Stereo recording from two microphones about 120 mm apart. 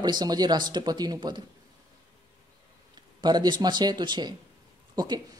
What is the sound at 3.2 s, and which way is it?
Speech, 40° right (ahead or behind).